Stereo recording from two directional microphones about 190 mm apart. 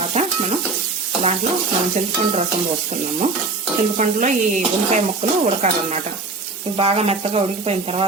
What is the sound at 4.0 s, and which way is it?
Speech, 40° right (ahead or behind).